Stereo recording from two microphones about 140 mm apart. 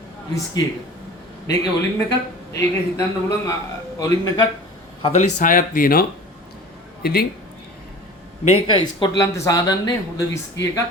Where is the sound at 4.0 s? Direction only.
25° left (ahead or behind).